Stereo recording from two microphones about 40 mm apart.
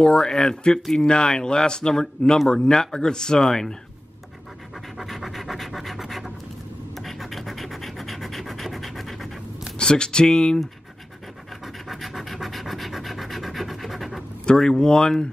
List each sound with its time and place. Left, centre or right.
0.0 s speech: centre
3.4 s speech: centre
4.9 s scratch: centre
9.8 s speech: left
11.6 s scratch: centre
14.7 s speech: centre